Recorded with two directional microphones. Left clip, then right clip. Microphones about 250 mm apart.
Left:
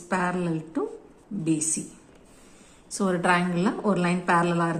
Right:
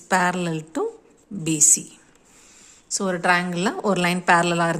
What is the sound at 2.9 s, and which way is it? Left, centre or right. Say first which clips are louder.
A woman's voice: right 3 dB; right.